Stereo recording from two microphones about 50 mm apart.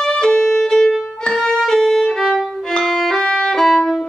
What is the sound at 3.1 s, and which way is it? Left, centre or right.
Violin, centre.